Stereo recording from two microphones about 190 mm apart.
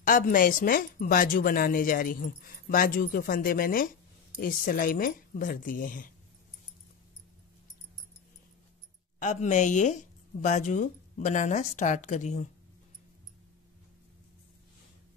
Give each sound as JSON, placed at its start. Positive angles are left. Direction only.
{"t": 0.0, "sound": "a woman's voice", "side_deg": 45}
{"t": 9.2, "sound": "a woman's voice", "side_deg": 40}